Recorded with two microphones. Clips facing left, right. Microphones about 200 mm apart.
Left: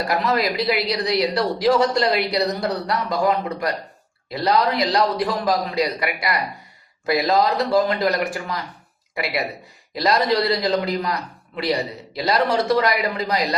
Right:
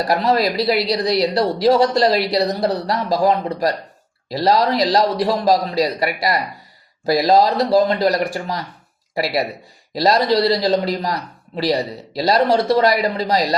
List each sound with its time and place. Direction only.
0.1 s a man's voice: 30° right (ahead or behind)